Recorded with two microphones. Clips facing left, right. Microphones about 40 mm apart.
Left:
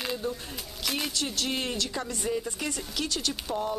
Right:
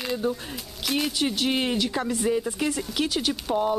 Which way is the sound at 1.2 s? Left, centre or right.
Centre.